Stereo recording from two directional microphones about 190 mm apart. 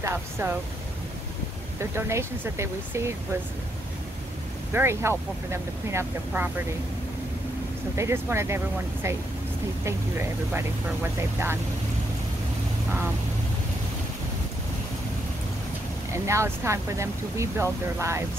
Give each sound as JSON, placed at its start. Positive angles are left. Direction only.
{"t": 0.0, "sound": "speech", "side_deg": -10}
{"t": 1.8, "sound": "speech", "side_deg": -15}
{"t": 4.7, "sound": "speech", "side_deg": -15}
{"t": 7.9, "sound": "speech", "side_deg": -15}
{"t": 10.5, "sound": "speech", "side_deg": -10}
{"t": 16.1, "sound": "speech", "side_deg": -15}